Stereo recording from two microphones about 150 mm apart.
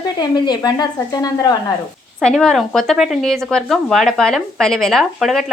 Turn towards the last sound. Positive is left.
turn(degrees=0)  # may be behind; listen again after turning